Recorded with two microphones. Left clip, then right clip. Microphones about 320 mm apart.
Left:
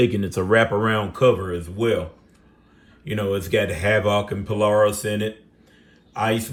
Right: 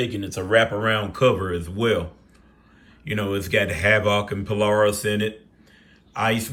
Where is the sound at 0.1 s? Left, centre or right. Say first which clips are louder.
Left 1 dB; centre.